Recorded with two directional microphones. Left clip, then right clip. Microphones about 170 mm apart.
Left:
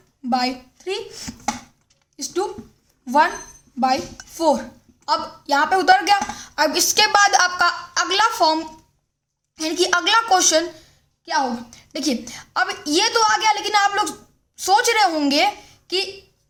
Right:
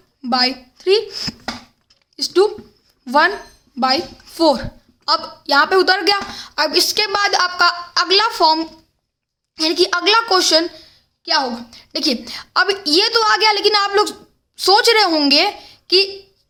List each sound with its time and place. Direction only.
0.2 s a woman's voice: 45° right (ahead or behind)
11.7 s a woman's voice: 30° right (ahead or behind)